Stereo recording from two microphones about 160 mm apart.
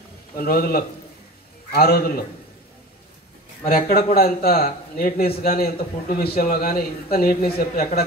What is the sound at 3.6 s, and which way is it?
A man's voice, 65° left (ahead or behind).